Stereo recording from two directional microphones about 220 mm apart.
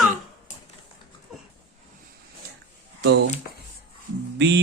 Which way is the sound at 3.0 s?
50° right (ahead or behind).